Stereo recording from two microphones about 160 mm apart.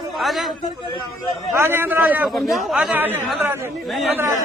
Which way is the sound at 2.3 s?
Centre (ahead or behind).